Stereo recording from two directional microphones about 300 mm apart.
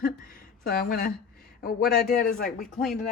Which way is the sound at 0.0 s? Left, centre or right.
Left.